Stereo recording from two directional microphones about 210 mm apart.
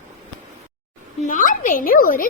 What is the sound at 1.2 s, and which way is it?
A woman's voice, 40° left (ahead or behind).